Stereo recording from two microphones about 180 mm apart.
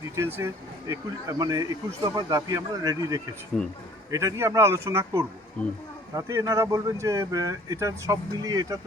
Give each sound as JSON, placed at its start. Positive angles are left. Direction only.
{"t": 0.2, "sound": "speech", "side_deg": -15}
{"t": 3.6, "sound": "a man's voice", "side_deg": 5}
{"t": 4.1, "sound": "speech", "side_deg": -20}
{"t": 5.6, "sound": "speech", "side_deg": 10}
{"t": 6.1, "sound": "speech", "side_deg": -20}